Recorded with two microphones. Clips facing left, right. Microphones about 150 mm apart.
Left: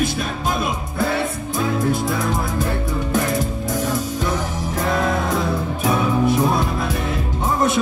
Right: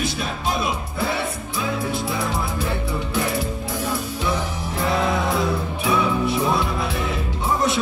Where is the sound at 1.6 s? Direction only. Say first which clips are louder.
Left 5 dB; 45° left (ahead or behind).